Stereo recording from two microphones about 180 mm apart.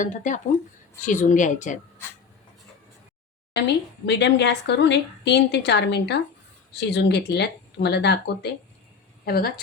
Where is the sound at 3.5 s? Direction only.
70° left (ahead or behind).